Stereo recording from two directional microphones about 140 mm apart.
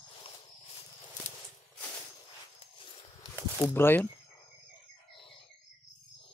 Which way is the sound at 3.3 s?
20° left (ahead or behind).